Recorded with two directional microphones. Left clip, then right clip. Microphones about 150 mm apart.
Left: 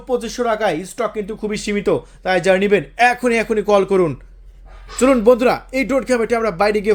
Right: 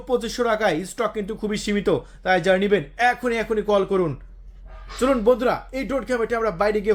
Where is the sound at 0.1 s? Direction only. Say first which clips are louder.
Left 3 dB; 5° left (ahead or behind).